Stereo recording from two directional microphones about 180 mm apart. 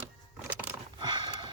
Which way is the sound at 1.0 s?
25° right (ahead or behind).